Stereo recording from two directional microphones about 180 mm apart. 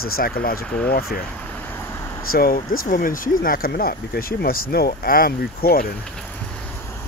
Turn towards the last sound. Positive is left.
turn(degrees=55)  # may be behind; listen again after turning